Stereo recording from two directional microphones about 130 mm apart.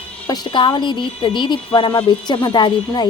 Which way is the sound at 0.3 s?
35° left (ahead or behind).